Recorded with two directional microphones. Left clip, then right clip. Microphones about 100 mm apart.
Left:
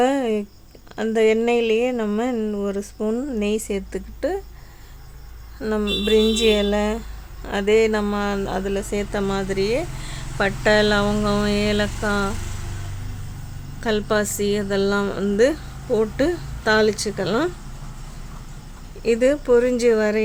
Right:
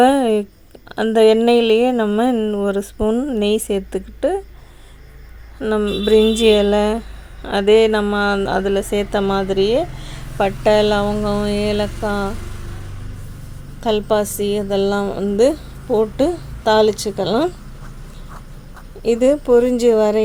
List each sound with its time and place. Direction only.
0.0 s a sound: 35° right (ahead or behind)
0.9 s speech: 35° right (ahead or behind)
4.2 s a woman's voice: 20° right (ahead or behind)
5.5 s a woman's voice: 25° right (ahead or behind)
5.9 s speech: 35° right (ahead or behind)
9.2 s speech: 15° right (ahead or behind)
9.5 s speech: 30° left (ahead or behind)
10.3 s speech: 10° right (ahead or behind)
13.8 s a woman's voice: 15° right (ahead or behind)
19.0 s a woman's voice: 20° right (ahead or behind)